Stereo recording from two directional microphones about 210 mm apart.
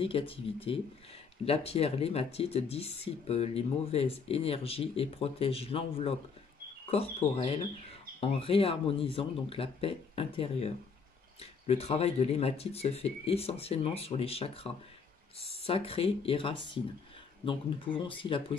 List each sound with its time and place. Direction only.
0.0 s speech: 25° left (ahead or behind)